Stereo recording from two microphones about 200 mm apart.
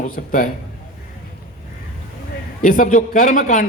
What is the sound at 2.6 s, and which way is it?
A man's voice, 40° left (ahead or behind).